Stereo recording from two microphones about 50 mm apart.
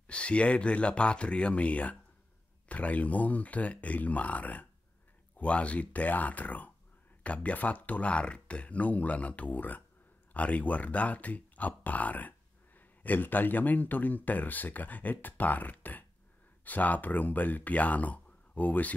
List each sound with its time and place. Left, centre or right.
0.0 s speech: left